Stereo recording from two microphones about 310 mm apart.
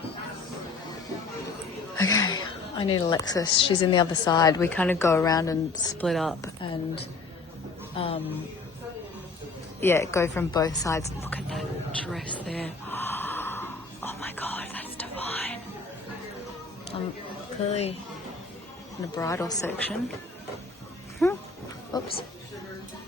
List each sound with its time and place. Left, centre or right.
2.0 s a sound: centre
3.9 s a woman's voice: centre
7.9 s a woman's voice: centre
9.8 s a woman's voice: centre
12.0 s gasp: centre
16.9 s speech: centre
19.1 s a woman's voice: centre
21.2 s dog: centre
21.9 s a woman's voice: centre